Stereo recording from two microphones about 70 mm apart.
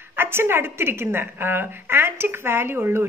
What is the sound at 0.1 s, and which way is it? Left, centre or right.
A woman's voice, right.